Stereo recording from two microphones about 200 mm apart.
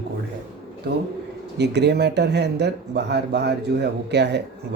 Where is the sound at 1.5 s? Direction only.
55° right (ahead or behind).